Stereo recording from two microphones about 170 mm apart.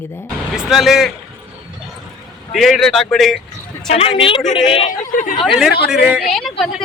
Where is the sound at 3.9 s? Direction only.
35° left (ahead or behind).